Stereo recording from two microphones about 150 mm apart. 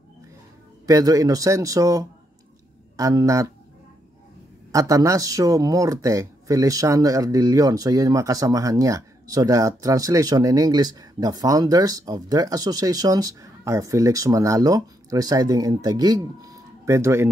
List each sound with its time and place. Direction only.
0.8 s speech: 20° right (ahead or behind)
4.7 s speech: 20° right (ahead or behind)